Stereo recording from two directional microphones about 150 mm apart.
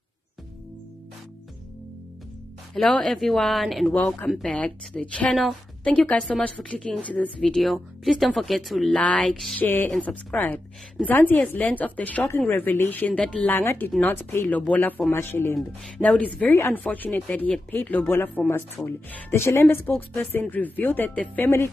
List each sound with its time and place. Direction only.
2.7 s a woman's voice: centre (ahead or behind)
13.6 s a woman's voice: 15° left (ahead or behind)
15.5 s a woman's voice: 5° left (ahead or behind)